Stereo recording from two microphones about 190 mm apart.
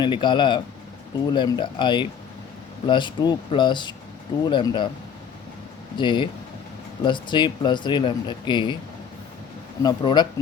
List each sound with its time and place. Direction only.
0.0 s speech: 25° left (ahead or behind)
6.0 s speech: 25° left (ahead or behind)
9.8 s speech: 25° left (ahead or behind)